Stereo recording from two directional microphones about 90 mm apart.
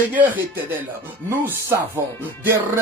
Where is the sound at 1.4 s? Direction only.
25° right (ahead or behind).